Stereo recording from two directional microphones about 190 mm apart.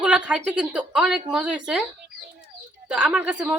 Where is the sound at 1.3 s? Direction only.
5° right (ahead or behind).